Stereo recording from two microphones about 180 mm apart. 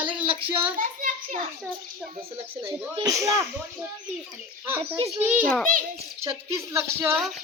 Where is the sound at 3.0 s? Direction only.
15° right (ahead or behind).